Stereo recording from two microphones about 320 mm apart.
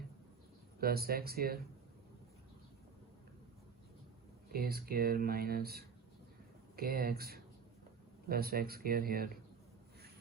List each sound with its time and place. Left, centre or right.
0.8 s speech: right
4.5 s speech: right